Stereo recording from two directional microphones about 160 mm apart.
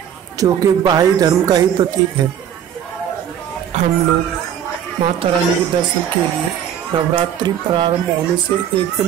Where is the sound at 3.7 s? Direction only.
50° right (ahead or behind).